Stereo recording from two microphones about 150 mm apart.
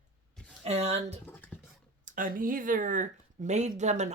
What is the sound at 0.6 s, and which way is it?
Speech, 45° right (ahead or behind).